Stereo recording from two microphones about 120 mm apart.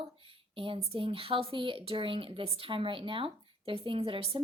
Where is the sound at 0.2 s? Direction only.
50° right (ahead or behind).